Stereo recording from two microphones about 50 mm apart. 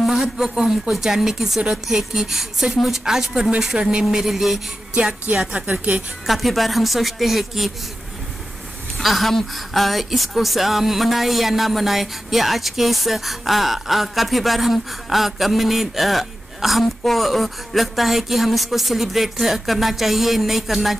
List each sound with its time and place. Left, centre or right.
0.1 s a woman's voice: centre
4.9 s a woman's voice: right
6.2 s speech: centre
8.9 s speech: centre